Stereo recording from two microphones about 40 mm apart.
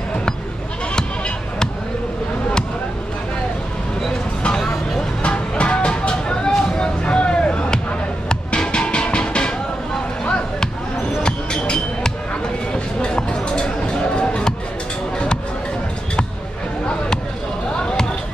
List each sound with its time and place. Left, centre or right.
5.2 s music: left
6.8 s a sound: left
8.3 s music: left
11.2 s music: left